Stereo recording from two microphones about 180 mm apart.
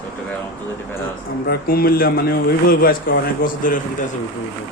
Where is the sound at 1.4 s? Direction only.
60° left (ahead or behind).